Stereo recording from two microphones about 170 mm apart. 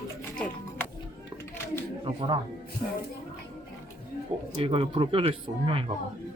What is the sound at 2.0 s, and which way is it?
Speech, 30° right (ahead or behind).